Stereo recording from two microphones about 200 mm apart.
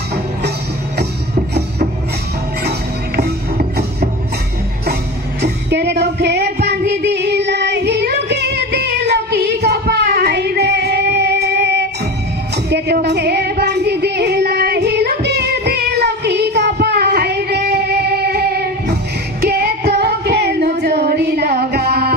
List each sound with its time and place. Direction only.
3.2 s music: 50° right (ahead or behind)
5.4 s music: 55° right (ahead or behind)
12.6 s child singing: 55° right (ahead or behind)
19.4 s singing: 50° right (ahead or behind)